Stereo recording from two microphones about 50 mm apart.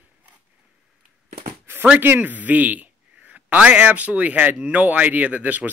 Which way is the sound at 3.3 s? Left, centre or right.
Right.